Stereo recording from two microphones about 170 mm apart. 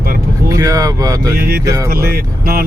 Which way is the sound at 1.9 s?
60° right (ahead or behind).